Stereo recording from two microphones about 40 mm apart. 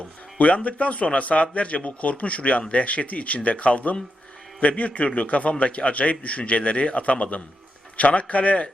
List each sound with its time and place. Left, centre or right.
0.3 s speech: left